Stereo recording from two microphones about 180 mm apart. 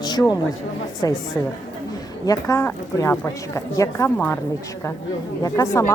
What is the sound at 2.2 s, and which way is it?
A woman's voice, 20° left (ahead or behind).